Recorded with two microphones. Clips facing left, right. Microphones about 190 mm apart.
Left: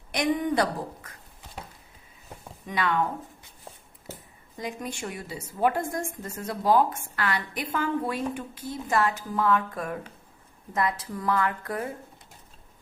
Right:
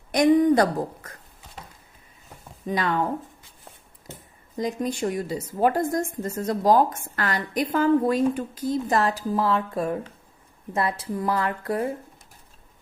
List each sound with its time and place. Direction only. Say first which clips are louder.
0.1 s a woman's voice: right 8 dB; 45° right (ahead or behind)
2.6 s a woman's voice: right 3 dB; 40° right (ahead or behind)
4.5 s a woman's voice: right 8 dB; 40° right (ahead or behind)